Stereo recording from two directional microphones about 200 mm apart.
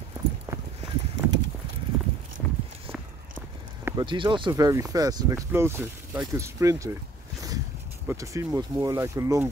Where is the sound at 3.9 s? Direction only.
20° right (ahead or behind).